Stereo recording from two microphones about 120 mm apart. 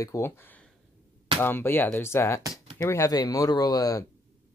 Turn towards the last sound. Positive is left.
turn(degrees=30)  # may be behind; listen again after turning